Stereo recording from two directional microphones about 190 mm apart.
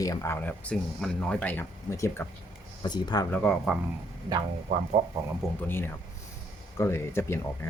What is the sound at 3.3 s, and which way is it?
Speech, 5° left (ahead or behind).